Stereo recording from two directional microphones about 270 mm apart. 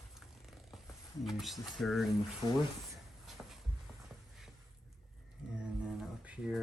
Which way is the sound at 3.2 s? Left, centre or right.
Centre.